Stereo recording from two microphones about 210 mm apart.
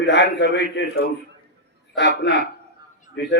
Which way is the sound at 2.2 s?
55° left (ahead or behind).